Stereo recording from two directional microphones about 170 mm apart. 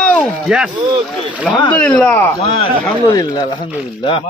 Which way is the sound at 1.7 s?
5° left (ahead or behind).